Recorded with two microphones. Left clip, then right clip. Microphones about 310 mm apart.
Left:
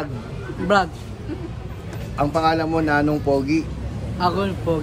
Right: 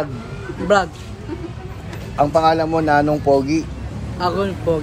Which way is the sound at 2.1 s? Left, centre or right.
Centre.